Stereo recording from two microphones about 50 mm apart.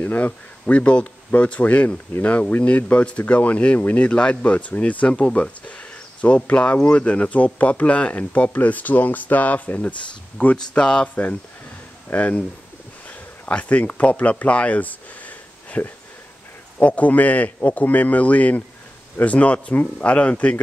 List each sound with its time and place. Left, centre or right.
0.0 s speech: left; by 11.1 s centre
12.1 s a man's voice: left
13.5 s a man's voice: left